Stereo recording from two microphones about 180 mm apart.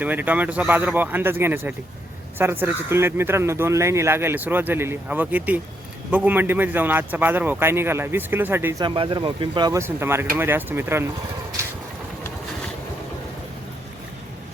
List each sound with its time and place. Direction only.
0.0 s speech: 10° right (ahead or behind)
8.8 s speech: 25° right (ahead or behind)